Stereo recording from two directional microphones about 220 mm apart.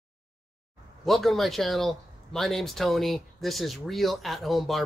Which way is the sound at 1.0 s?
Centre (ahead or behind).